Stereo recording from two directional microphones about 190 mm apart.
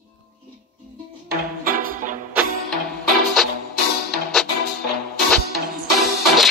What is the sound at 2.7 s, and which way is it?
Music, centre (ahead or behind).